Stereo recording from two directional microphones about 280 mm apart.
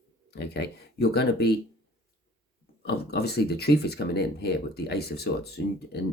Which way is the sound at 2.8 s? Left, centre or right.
Left.